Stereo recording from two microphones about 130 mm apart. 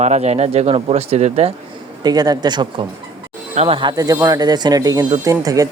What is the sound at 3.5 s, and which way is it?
A man's voice, 45° right (ahead or behind).